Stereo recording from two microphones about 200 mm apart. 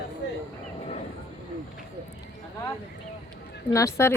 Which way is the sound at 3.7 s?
15° left (ahead or behind).